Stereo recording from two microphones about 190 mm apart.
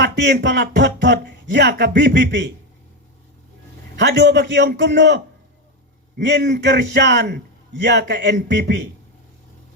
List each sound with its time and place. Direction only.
0.0 s speech: 65° right (ahead or behind)
4.0 s speech: 65° right (ahead or behind)